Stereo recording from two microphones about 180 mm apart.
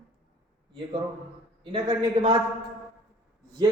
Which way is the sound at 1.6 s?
30° right (ahead or behind).